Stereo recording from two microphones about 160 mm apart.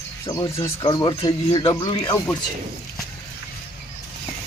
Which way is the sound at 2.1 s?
15° left (ahead or behind).